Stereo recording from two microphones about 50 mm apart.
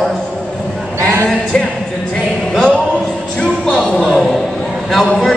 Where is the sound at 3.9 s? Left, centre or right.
Centre.